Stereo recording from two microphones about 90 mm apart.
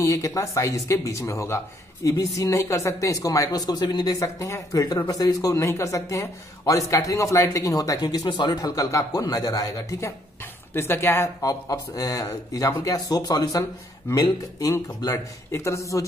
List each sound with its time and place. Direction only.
0.0 s speech: 35° left (ahead or behind); by 8.5 s 55° left (ahead or behind)
8.5 s a woman's voice: 40° left (ahead or behind)
11.4 s speech: 40° left (ahead or behind)